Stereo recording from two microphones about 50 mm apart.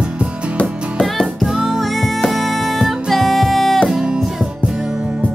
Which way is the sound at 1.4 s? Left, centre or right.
Centre.